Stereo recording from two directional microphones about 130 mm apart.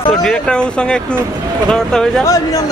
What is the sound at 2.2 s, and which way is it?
Speech, 25° left (ahead or behind).